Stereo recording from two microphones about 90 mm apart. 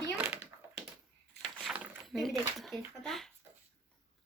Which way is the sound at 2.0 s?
Centre (ahead or behind).